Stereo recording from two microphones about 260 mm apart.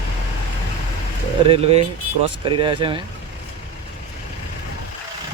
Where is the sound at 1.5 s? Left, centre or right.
Right.